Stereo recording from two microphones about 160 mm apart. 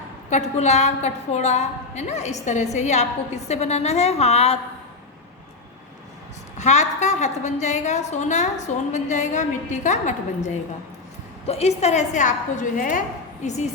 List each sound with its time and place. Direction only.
0.3 s a woman's voice: 45° left (ahead or behind)
6.6 s a woman's voice: 45° left (ahead or behind)